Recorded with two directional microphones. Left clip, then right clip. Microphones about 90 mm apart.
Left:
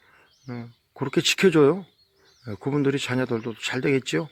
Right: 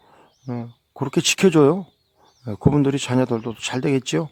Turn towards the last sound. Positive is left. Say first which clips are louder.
# right 2 dB
turn(degrees=-55)  # may be behind; listen again after turning